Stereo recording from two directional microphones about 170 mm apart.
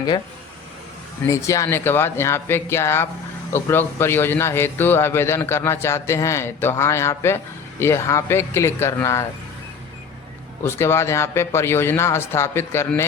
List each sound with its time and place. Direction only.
1.2 s a man's voice: 15° left (ahead or behind)
10.6 s a man's voice: 15° left (ahead or behind)